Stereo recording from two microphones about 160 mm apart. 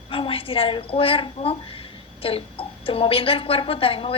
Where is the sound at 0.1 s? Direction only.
35° left (ahead or behind).